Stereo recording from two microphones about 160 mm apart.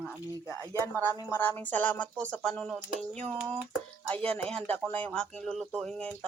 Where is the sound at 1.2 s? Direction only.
10° left (ahead or behind).